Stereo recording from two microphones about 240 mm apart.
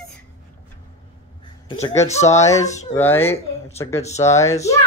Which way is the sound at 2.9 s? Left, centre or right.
Centre.